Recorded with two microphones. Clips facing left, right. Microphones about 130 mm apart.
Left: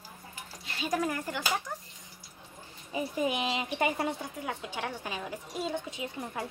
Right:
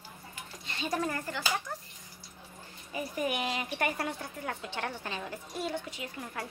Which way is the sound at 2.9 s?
20° left (ahead or behind).